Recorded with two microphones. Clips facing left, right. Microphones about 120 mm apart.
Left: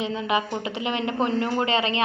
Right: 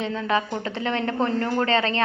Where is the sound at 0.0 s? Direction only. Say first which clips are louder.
Right 1 dB; 15° left (ahead or behind).